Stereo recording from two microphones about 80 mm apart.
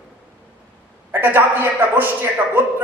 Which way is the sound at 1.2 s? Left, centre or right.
Right.